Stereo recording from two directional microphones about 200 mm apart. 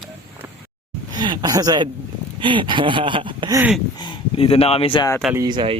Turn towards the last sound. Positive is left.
turn(degrees=-25)  # may be behind; listen again after turning